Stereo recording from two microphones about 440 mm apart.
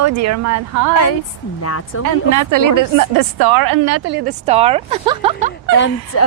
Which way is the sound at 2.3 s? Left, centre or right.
Right.